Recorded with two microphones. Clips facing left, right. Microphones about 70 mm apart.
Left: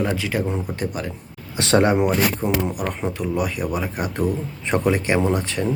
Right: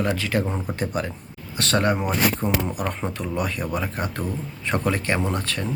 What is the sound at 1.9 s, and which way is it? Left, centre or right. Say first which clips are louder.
Speech: left 4 dB; centre.